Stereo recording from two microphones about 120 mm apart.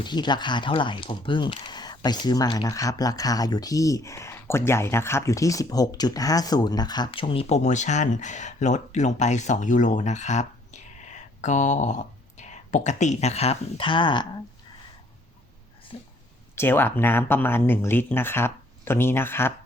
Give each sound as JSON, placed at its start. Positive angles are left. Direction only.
{"t": 0.0, "sound": "speech", "side_deg": 40}
{"t": 7.4, "sound": "speech", "side_deg": 70}
{"t": 15.9, "sound": "speech", "side_deg": 60}
{"t": 16.6, "sound": "speech", "side_deg": 15}